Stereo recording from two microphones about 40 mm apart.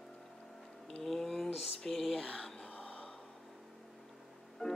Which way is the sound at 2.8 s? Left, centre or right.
Left.